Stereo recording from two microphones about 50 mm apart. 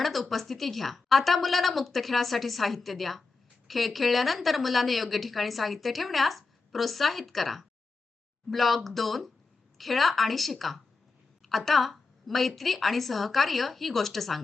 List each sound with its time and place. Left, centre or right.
0.0 s a woman's voice: centre